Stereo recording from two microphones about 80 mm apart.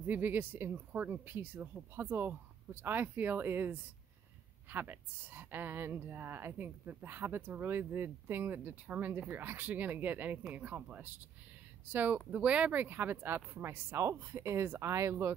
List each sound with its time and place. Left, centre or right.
0.0 s a woman's voice: right